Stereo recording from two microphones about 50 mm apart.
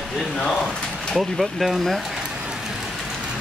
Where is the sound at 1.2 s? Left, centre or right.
Centre.